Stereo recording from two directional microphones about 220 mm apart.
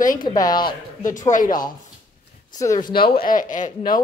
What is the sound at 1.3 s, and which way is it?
Speech, 40° left (ahead or behind).